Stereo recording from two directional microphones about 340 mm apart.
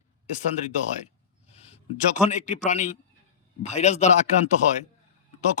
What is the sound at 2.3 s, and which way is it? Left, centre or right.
Speech, left.